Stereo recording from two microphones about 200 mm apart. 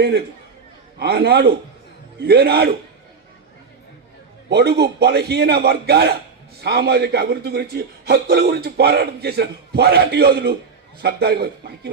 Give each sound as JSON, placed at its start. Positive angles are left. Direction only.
{"t": 0.9, "sound": "a man's voice", "side_deg": -55}
{"t": 4.4, "sound": "a man's voice", "side_deg": -55}